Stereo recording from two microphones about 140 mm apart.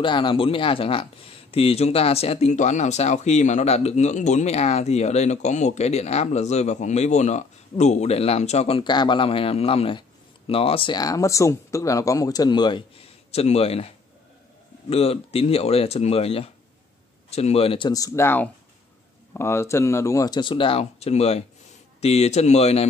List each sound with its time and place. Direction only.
0.0 s speech: 35° left (ahead or behind)
17.8 s speech: 25° left (ahead or behind); by 22.8 s 50° left (ahead or behind)